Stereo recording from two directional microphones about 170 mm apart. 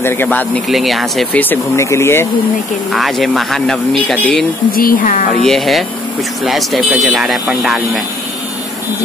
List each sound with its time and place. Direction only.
0.0 s speech: 15° left (ahead or behind)
0.7 s speech: centre (ahead or behind); by 2.2 s 15° left (ahead or behind)
2.9 s speech: centre (ahead or behind)
4.7 s speech: 55° left (ahead or behind)
5.4 s speech: centre (ahead or behind)